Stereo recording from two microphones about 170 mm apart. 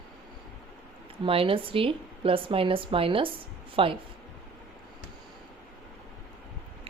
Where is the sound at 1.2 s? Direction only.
35° right (ahead or behind).